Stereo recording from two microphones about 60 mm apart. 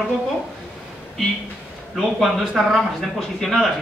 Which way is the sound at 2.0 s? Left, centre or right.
Centre.